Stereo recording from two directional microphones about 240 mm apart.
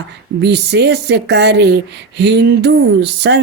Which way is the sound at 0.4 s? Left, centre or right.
Right.